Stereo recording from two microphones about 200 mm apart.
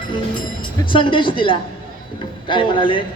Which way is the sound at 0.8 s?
25° left (ahead or behind).